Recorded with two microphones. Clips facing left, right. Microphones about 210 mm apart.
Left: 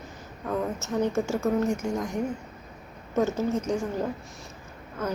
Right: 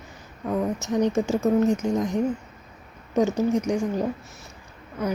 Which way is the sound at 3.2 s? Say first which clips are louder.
Right 4 dB; 15° right (ahead or behind).